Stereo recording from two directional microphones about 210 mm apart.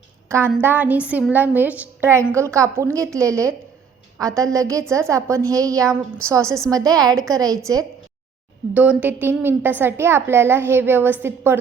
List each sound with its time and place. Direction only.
0.3 s a woman's voice: 10° right (ahead or behind)